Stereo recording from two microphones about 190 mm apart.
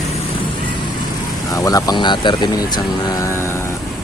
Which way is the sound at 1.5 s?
20° left (ahead or behind).